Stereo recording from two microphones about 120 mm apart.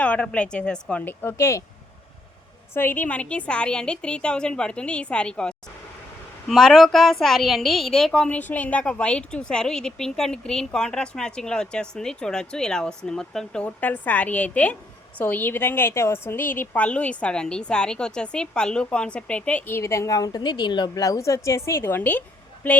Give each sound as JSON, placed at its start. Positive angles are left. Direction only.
{"t": 0.0, "sound": "a woman's voice", "side_deg": 10}
{"t": 2.7, "sound": "a woman's voice", "side_deg": 15}